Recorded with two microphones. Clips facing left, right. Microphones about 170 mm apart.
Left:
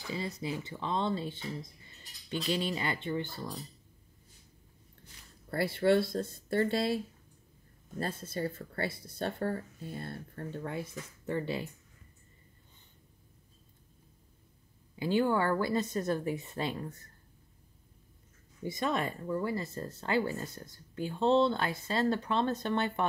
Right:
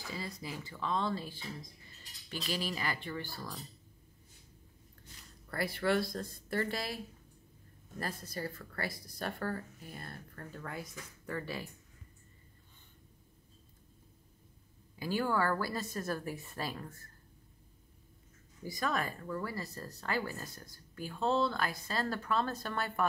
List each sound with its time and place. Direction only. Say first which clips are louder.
0.1 s speech: left 7 dB; 25° left (ahead or behind)
5.5 s speech: left 5 dB; 25° left (ahead or behind)
8.0 s speech: left 5 dB; 25° left (ahead or behind)
15.0 s speech: left 4 dB; 25° left (ahead or behind)
18.6 s speech: left 3 dB; 25° left (ahead or behind)